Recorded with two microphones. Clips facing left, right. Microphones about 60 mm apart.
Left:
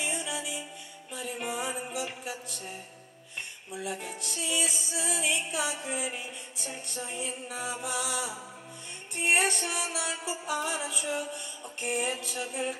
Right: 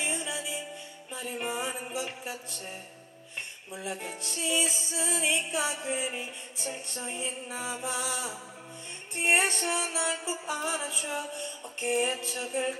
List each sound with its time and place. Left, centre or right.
0.0 s music: right
3.8 s music: right